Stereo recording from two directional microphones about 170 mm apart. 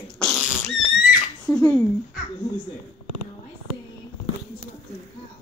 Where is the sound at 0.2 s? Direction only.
Centre (ahead or behind).